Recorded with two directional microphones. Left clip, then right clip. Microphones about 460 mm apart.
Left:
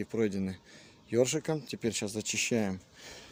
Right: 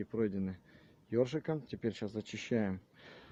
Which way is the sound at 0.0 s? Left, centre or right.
Right.